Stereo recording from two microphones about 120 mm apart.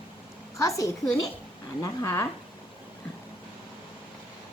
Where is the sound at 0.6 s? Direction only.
25° left (ahead or behind).